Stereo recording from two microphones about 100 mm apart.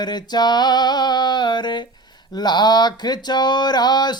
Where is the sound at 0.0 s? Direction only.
45° left (ahead or behind).